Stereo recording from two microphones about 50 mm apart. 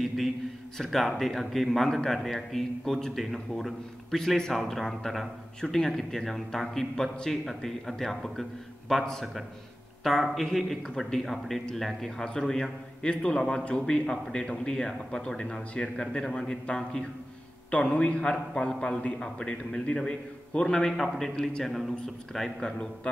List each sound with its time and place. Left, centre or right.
0.7 s a man's voice: centre
10.0 s a man's voice: centre